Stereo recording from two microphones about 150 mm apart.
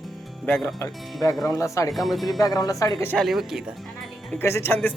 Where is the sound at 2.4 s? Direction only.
25° left (ahead or behind).